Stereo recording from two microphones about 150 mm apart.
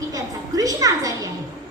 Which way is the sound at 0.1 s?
25° right (ahead or behind).